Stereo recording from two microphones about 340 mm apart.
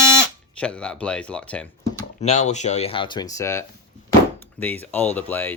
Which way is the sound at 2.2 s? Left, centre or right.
Centre.